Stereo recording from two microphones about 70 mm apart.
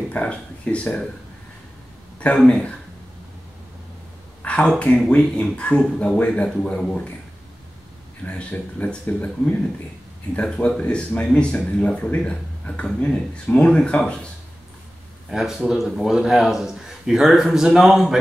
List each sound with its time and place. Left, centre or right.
0.1 s speech: centre
2.1 s speech: centre
4.4 s speech: centre
8.3 s speech: centre
15.2 s speech: centre